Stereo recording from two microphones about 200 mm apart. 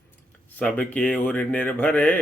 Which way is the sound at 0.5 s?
5° left (ahead or behind).